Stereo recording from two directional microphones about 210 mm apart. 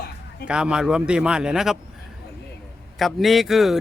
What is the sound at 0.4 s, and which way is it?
Speech, 5° right (ahead or behind).